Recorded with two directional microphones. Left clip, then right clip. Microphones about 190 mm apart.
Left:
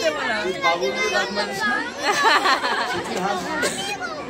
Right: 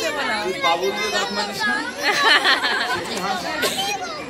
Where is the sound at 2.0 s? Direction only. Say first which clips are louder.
Right 2 dB; 15° left (ahead or behind).